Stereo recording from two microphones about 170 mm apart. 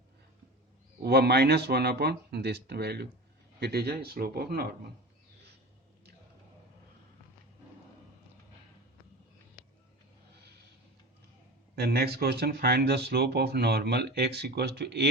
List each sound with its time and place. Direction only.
1.0 s speech: 70° right (ahead or behind)
11.8 s speech: 65° right (ahead or behind)